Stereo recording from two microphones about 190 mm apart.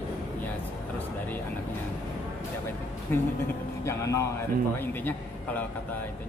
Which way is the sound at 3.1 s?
10° left (ahead or behind).